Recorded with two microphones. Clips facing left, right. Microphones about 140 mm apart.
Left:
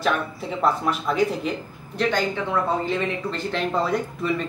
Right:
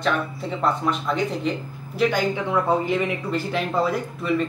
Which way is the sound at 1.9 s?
10° right (ahead or behind).